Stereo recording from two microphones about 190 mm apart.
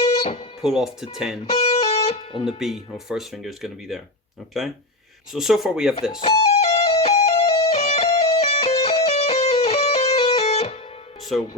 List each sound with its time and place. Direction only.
0.0 s music: 35° left (ahead or behind)
0.6 s speech: centre (ahead or behind)
1.5 s music: 35° left (ahead or behind)
2.6 s speech: centre (ahead or behind)
6.0 s music: 25° left (ahead or behind)